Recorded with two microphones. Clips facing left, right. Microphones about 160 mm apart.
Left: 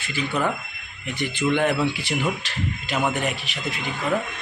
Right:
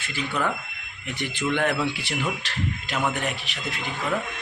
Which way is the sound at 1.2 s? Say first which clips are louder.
Left 3 dB; 5° left (ahead or behind).